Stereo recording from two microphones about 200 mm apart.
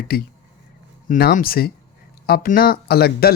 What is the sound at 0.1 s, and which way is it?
Speech, 50° left (ahead or behind).